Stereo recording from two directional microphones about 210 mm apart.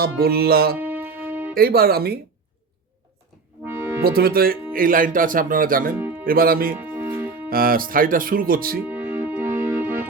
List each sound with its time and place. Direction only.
0.0 s speech: 45° right (ahead or behind)
0.8 s music: 10° right (ahead or behind)
1.5 s speech: 45° right (ahead or behind)
4.0 s speech: 45° right (ahead or behind)
6.7 s music: 10° right (ahead or behind)
7.5 s speech: 45° right (ahead or behind)
8.9 s music: 10° right (ahead or behind)